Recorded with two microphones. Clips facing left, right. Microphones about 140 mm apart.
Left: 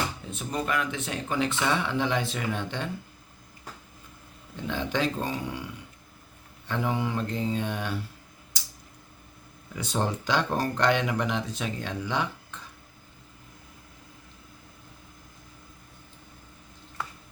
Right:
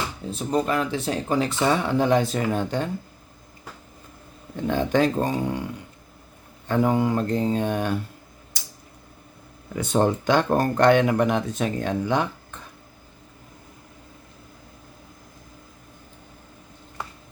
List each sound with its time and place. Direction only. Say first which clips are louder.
0.3 s speech: right 11 dB; 35° right (ahead or behind)
4.5 s speech: right 8 dB; 50° right (ahead or behind)
8.5 s a sound: right 3 dB; 55° right (ahead or behind)
9.7 s speech: right 8 dB; 55° right (ahead or behind)